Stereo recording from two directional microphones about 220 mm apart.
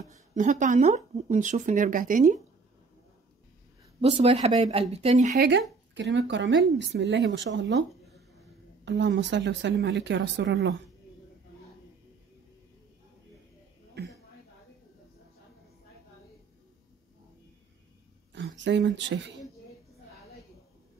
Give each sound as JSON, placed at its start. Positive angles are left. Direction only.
{"t": 0.1, "sound": "speech", "side_deg": -35}
{"t": 4.0, "sound": "speech", "side_deg": -25}
{"t": 5.9, "sound": "speech", "side_deg": -55}
{"t": 8.8, "sound": "speech", "side_deg": -55}
{"t": 14.0, "sound": "a sound", "side_deg": -50}
{"t": 18.3, "sound": "speech", "side_deg": -55}